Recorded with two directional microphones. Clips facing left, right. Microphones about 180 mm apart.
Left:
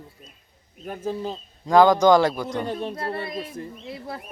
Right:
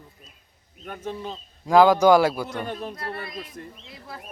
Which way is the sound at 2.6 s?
30° left (ahead or behind).